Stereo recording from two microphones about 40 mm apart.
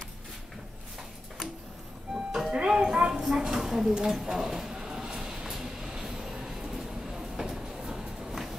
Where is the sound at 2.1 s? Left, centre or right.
Centre.